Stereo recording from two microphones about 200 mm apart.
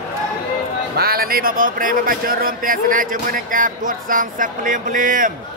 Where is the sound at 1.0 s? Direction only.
50° right (ahead or behind).